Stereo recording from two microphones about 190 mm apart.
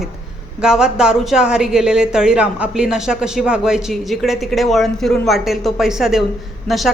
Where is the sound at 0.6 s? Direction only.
5° right (ahead or behind).